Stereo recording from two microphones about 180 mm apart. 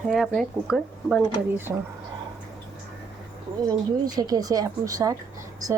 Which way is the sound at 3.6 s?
20° right (ahead or behind).